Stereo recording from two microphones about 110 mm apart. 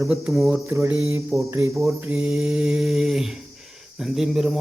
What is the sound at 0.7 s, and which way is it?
Mantra, 20° right (ahead or behind).